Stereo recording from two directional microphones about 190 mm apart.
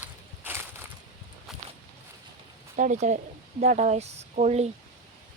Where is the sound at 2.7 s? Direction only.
40° right (ahead or behind).